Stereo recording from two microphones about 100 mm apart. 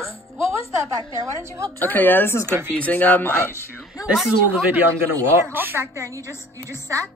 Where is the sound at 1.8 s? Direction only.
20° left (ahead or behind).